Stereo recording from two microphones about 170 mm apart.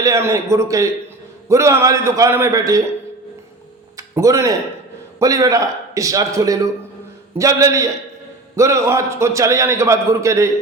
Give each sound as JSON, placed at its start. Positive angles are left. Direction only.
{"t": 0.0, "sound": "a man's voice", "side_deg": -20}
{"t": 3.9, "sound": "music", "side_deg": -20}
{"t": 5.2, "sound": "a man's voice", "side_deg": -20}